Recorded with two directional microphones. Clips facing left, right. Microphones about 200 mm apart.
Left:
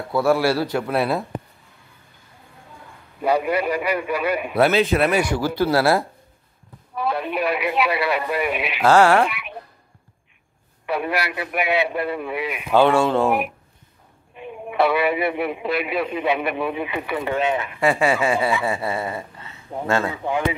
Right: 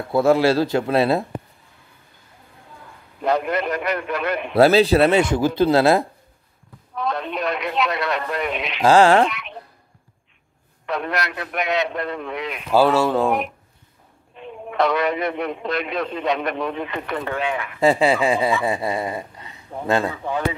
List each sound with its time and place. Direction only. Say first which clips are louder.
0.1 s a man's voice: right 3 dB; 25° right (ahead or behind)
3.2 s a man's voice: left 1 dB; 10° left (ahead or behind)
4.6 s a man's voice: right 5 dB; 30° right (ahead or behind)
7.0 s a man's voice: left 2 dB; 5° left (ahead or behind)
8.8 s speech: right 1 dB; 15° right (ahead or behind)
9.2 s a sound: right 2 dB; 5° left (ahead or behind)
10.9 s a man's voice: left 1 dB; 5° left (ahead or behind)
12.7 s a man's voice: even; 5° right (ahead or behind); by 17.7 s 25° left (ahead or behind)
17.7 s a man's voice: right 4 dB; 20° right (ahead or behind)
18.6 s dog: right 1 dB; 15° right (ahead or behind)
20.1 s a man's voice: left 1 dB; 15° left (ahead or behind)